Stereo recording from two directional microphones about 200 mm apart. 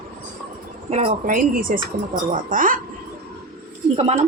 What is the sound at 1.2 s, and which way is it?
Speech, 45° right (ahead or behind).